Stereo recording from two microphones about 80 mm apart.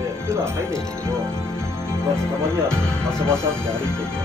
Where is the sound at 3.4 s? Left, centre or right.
Right.